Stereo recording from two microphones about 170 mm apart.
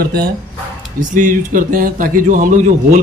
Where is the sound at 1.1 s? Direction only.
50° right (ahead or behind).